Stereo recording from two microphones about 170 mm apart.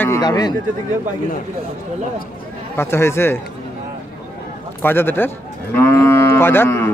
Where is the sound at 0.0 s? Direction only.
20° left (ahead or behind).